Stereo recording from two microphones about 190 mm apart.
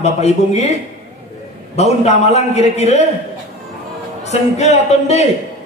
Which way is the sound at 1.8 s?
35° left (ahead or behind).